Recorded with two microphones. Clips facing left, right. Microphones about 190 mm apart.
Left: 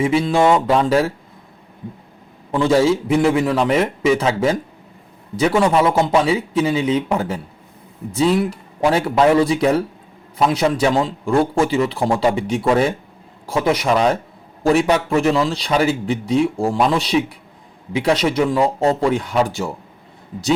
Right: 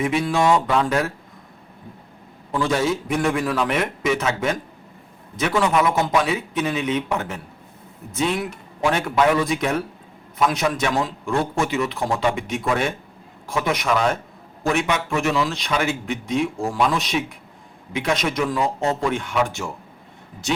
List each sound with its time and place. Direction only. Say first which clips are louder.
0.0 s a man's voice: left 5 dB; 30° left (ahead or behind)
2.5 s a man's voice: left 6 dB; 30° left (ahead or behind)